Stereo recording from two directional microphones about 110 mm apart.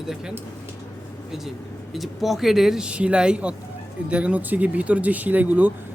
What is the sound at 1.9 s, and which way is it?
Speech, centre (ahead or behind).